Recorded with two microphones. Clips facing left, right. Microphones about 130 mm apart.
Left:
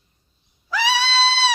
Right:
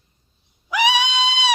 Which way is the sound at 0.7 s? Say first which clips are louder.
Right 2 dB; 15° right (ahead or behind).